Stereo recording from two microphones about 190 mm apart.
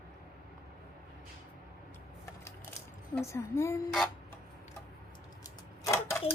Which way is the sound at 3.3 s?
15° left (ahead or behind).